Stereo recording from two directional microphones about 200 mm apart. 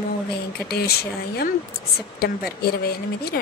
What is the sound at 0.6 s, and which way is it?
Speech, 50° left (ahead or behind).